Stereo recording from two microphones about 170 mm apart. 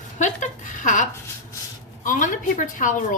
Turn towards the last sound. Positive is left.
turn(degrees=50)  # may be behind; listen again after turning